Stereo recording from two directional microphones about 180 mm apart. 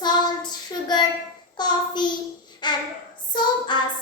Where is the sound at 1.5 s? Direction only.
25° left (ahead or behind).